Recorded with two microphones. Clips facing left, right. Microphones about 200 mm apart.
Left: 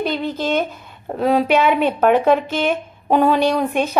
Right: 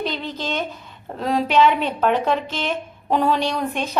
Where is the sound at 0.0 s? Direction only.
50° left (ahead or behind).